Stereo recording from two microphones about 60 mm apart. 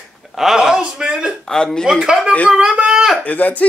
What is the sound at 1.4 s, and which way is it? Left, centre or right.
Speech, centre.